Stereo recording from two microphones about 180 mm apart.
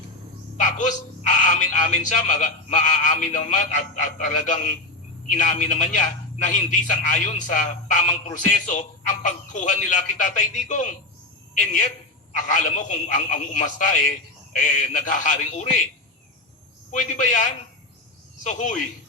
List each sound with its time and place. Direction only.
0.5 s a man's voice: 45° left (ahead or behind)
17.0 s a man's voice: 45° left (ahead or behind)